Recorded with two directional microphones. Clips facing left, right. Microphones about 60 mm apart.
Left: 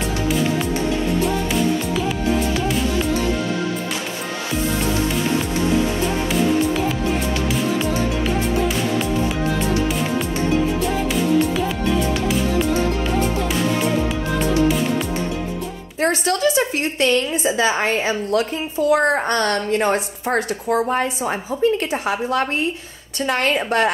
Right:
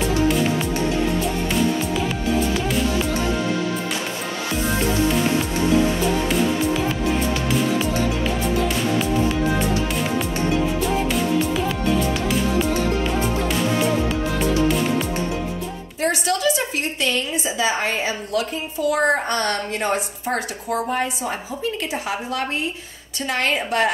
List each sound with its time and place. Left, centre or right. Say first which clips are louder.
16.0 s a woman's voice: left 3 dB; left